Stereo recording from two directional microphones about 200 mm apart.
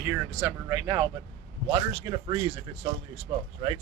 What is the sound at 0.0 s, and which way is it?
A man's voice, 10° right (ahead or behind).